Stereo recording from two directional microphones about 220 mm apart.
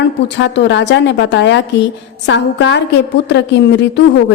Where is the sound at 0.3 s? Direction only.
55° left (ahead or behind).